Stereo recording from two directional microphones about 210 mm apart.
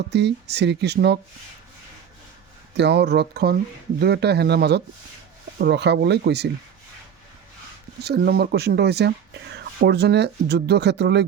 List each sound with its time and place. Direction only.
0.1 s speech: 55° right (ahead or behind)
2.7 s speech: 55° right (ahead or behind)
8.0 s speech: 50° right (ahead or behind)